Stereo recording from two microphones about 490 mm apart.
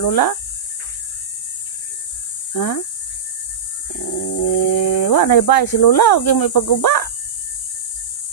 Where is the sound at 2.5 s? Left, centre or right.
Left.